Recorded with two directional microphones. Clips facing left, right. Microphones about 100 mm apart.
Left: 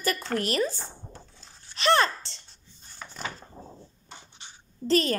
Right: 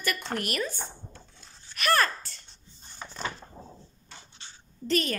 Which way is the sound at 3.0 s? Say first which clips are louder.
Right 1 dB; 15° right (ahead or behind).